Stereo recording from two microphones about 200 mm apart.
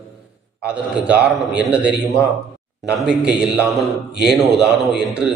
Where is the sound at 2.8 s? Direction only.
5° right (ahead or behind).